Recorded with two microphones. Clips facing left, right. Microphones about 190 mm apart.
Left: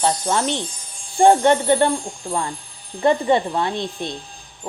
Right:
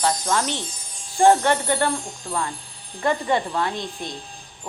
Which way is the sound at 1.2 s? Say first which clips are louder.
Left 3 dB; 20° left (ahead or behind).